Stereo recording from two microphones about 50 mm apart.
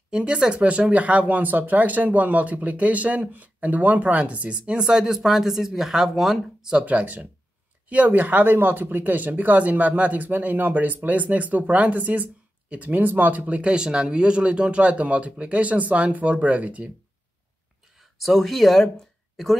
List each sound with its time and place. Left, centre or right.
0.1 s speech: centre
6.8 s speech: right
18.2 s speech: centre